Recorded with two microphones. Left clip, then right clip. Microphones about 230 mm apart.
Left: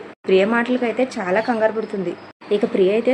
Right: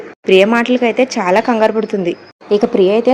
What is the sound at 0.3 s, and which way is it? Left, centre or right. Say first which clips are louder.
Speech: right 6 dB; right.